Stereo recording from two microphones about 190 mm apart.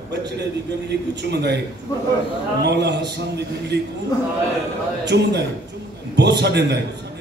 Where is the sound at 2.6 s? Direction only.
60° right (ahead or behind).